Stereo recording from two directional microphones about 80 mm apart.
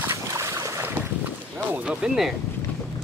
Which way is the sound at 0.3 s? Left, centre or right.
Right.